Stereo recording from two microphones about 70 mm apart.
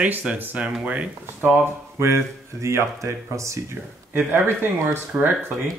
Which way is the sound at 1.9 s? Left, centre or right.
Right.